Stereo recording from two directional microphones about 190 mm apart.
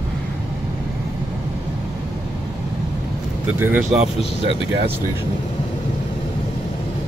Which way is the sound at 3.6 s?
10° right (ahead or behind).